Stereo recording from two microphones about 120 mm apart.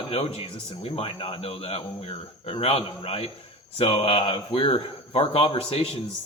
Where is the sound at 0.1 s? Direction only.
55° left (ahead or behind).